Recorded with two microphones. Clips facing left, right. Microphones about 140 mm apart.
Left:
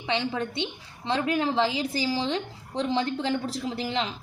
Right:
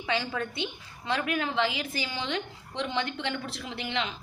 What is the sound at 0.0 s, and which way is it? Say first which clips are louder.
A woman's voice: left 3 dB; 25° left (ahead or behind).